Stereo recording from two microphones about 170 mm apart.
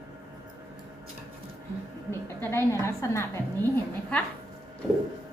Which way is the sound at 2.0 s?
15° left (ahead or behind).